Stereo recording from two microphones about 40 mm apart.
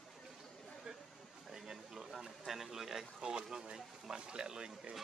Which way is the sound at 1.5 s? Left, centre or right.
Centre.